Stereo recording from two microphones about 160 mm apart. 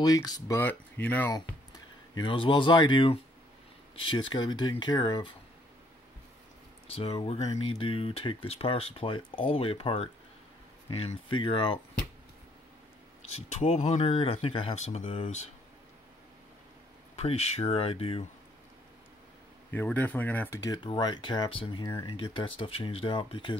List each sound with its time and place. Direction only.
0.0 s speech: 25° left (ahead or behind)
1.3 s speech: 25° left (ahead or behind)
6.9 s speech: 40° left (ahead or behind)
13.3 s speech: 45° left (ahead or behind)
14.1 s speech: 35° left (ahead or behind)
17.1 s speech: 40° left (ahead or behind)
19.7 s speech: 10° left (ahead or behind); by 23.6 s 30° left (ahead or behind)